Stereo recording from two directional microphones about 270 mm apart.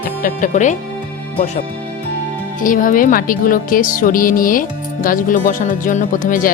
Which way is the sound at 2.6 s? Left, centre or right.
Left.